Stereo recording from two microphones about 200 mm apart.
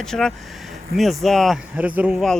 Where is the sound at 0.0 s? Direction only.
Centre (ahead or behind).